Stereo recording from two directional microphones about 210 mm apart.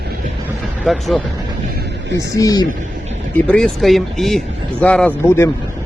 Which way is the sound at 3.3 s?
5° left (ahead or behind).